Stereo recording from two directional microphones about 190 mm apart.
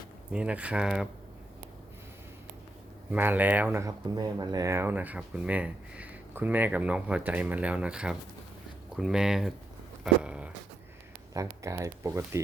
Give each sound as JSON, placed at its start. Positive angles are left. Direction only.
{"t": 0.3, "sound": "speech", "side_deg": -5}
{"t": 3.1, "sound": "speech", "side_deg": -10}
{"t": 10.0, "sound": "a sound", "side_deg": -5}
{"t": 11.3, "sound": "speech", "side_deg": -15}